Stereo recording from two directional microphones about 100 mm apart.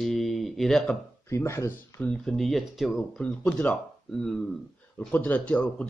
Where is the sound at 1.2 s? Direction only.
25° left (ahead or behind).